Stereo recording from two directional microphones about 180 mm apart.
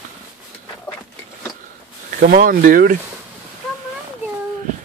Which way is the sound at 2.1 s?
50° right (ahead or behind).